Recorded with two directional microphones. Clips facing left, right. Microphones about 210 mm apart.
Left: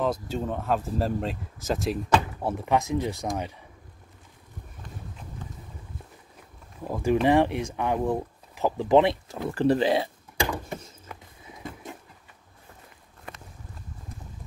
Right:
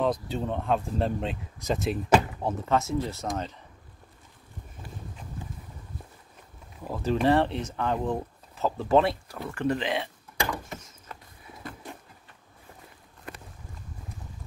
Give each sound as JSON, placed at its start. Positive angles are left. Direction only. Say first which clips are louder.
{"t": 0.0, "sound": "speech", "louder": "even", "side_deg": 0}
{"t": 2.5, "sound": "speech", "louder": "left 2 dB", "side_deg": 15}
{"t": 6.9, "sound": "speech", "louder": "left 2 dB", "side_deg": 15}
{"t": 9.5, "sound": "speech", "louder": "left 6 dB", "side_deg": 35}
{"t": 11.4, "sound": "music", "louder": "left 2 dB", "side_deg": 20}